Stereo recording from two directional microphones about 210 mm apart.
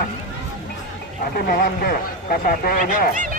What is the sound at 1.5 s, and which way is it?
Speech, 40° left (ahead or behind).